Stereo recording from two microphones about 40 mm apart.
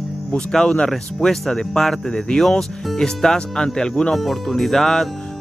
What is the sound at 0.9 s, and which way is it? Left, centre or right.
Speech, centre.